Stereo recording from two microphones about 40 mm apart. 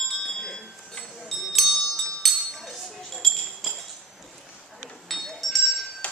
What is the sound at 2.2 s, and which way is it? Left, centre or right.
Chink, centre.